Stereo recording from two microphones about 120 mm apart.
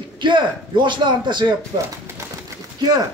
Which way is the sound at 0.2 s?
40° right (ahead or behind).